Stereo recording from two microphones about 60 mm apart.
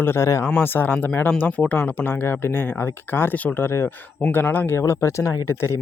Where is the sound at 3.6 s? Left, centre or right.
Left.